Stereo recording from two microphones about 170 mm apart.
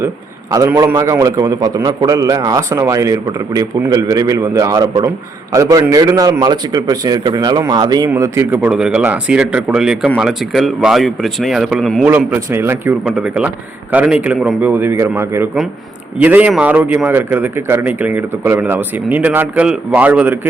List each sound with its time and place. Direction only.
0.5 s a man's voice: 20° right (ahead or behind); by 12.0 s centre (ahead or behind)
12.0 s a man's voice: 10° right (ahead or behind)